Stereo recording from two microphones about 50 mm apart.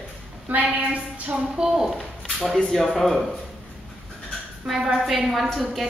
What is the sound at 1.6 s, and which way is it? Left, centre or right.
Speech, centre.